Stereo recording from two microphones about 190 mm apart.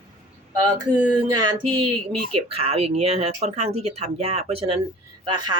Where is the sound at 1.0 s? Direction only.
20° right (ahead or behind).